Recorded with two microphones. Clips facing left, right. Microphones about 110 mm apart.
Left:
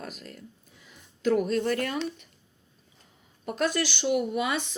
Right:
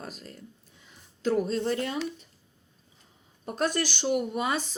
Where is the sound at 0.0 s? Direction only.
30° right (ahead or behind).